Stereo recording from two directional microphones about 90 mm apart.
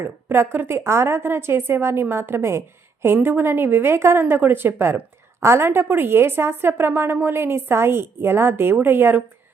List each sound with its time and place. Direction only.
0.0 s a woman's voice: 25° right (ahead or behind)